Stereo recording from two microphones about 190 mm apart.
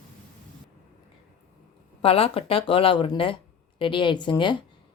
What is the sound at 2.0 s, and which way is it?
Speech, 30° left (ahead or behind).